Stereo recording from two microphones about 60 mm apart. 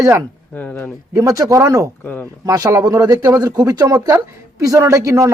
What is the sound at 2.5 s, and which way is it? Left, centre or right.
Speech, right.